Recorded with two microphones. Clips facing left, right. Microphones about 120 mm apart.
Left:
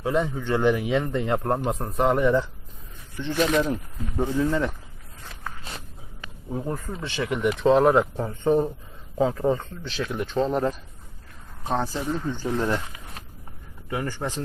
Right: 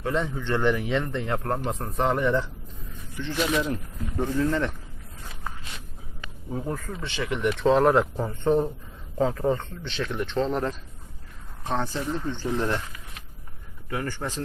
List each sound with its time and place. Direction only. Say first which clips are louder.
0.0 s a man's voice: left 3 dB; 10° left (ahead or behind)
3.3 s speech: left 3 dB; centre (ahead or behind)
4.2 s a man's voice: left 1 dB; 10° left (ahead or behind)
6.5 s a man's voice: left 1 dB; 5° left (ahead or behind)